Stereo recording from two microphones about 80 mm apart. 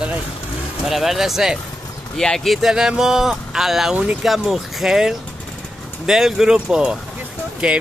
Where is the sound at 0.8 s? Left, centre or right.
Centre.